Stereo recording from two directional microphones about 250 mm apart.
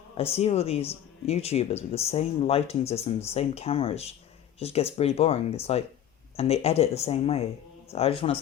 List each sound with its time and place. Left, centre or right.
0.2 s speech: left